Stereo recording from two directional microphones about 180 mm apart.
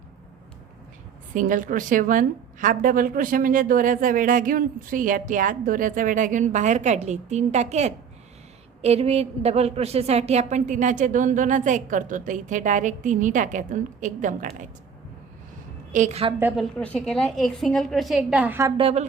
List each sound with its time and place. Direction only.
1.3 s a woman's voice: 45° right (ahead or behind)
15.9 s a woman's voice: 40° right (ahead or behind)
16.4 s a woman's voice: 10° right (ahead or behind)
16.7 s a woman's voice: 5° left (ahead or behind); by 18.7 s 10° right (ahead or behind)
18.8 s a woman's voice: 35° right (ahead or behind)